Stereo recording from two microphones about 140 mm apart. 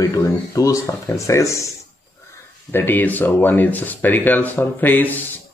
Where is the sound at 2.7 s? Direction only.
15° left (ahead or behind).